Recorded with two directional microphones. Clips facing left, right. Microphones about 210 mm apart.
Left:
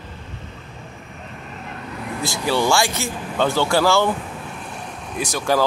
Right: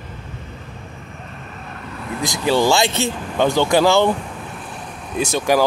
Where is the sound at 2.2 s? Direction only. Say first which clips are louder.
Right 4 dB; 15° right (ahead or behind).